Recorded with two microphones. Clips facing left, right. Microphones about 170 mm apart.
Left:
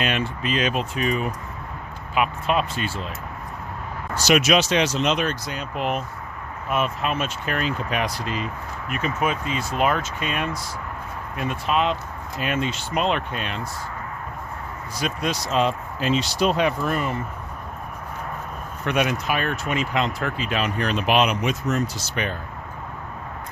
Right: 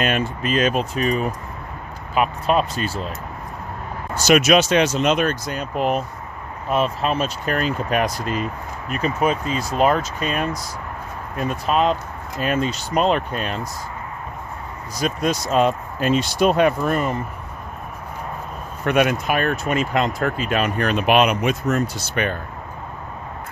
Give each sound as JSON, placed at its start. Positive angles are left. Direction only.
{"t": 0.0, "sound": "speech", "side_deg": -45}
{"t": 4.1, "sound": "speech", "side_deg": -50}
{"t": 14.9, "sound": "speech", "side_deg": -45}
{"t": 18.9, "sound": "speech", "side_deg": -55}